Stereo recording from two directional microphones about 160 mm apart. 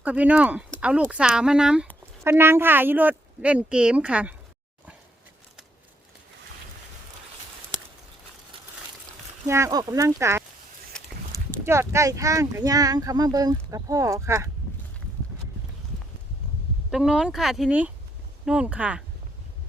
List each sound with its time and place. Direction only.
0.0 s speech: 10° right (ahead or behind)
9.5 s speech: 20° right (ahead or behind)
10.9 s a sound: 5° left (ahead or behind)
11.6 s speech: 15° right (ahead or behind)
16.9 s speech: 5° right (ahead or behind)